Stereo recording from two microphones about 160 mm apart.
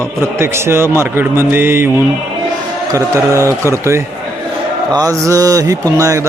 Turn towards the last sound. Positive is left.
turn(degrees=-20)  # may be behind; listen again after turning